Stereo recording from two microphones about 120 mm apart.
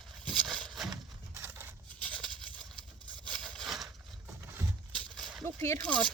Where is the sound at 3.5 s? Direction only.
Centre (ahead or behind).